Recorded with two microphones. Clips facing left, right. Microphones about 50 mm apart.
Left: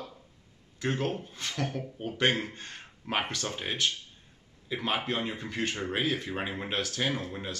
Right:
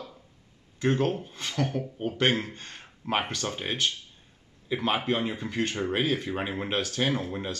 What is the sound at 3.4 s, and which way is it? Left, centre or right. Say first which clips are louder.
Speech: right 2 dB; centre.